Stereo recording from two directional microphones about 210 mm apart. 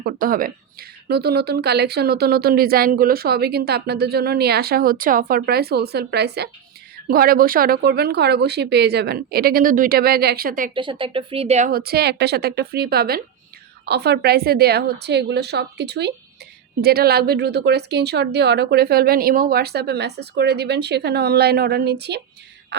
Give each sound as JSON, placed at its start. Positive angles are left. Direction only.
{"t": 0.0, "sound": "speech", "side_deg": -45}
{"t": 10.8, "sound": "speech", "side_deg": -25}
{"t": 11.7, "sound": "speech", "side_deg": -45}